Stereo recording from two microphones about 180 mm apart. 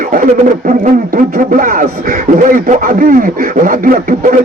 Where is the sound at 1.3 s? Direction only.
50° right (ahead or behind).